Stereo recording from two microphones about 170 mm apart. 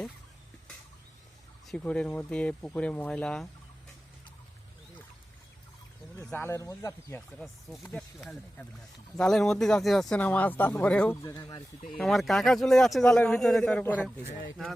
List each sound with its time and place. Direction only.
1.6 s speech: 5° left (ahead or behind)
6.1 s speech: 15° left (ahead or behind)
7.3 s a man's voice: centre (ahead or behind)
9.1 s a man's voice: centre (ahead or behind)
11.2 s speech: 20° left (ahead or behind)
11.9 s a man's voice: centre (ahead or behind)